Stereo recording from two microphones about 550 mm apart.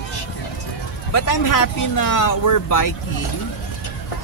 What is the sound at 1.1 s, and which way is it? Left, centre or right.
Speech, left.